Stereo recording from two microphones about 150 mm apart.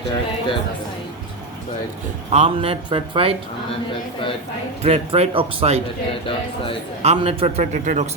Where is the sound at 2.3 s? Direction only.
45° right (ahead or behind).